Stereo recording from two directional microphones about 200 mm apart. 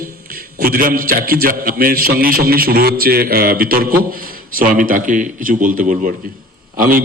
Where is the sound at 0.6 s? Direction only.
45° right (ahead or behind).